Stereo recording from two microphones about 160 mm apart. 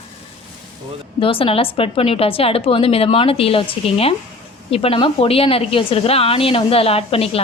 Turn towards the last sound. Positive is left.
turn(degrees=35)  # may be behind; listen again after turning